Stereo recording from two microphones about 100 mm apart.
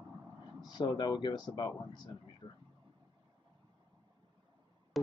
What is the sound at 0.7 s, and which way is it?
Speech, 45° left (ahead or behind).